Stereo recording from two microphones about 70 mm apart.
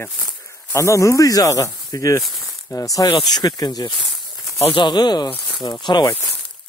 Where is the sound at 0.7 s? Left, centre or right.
Left.